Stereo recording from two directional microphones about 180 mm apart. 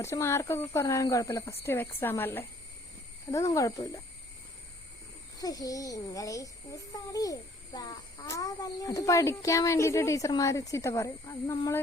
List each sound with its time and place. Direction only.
0.0 s speech: 15° left (ahead or behind)
5.4 s a child's voice: 20° left (ahead or behind)